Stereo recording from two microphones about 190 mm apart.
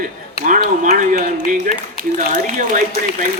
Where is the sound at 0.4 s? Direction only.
40° right (ahead or behind).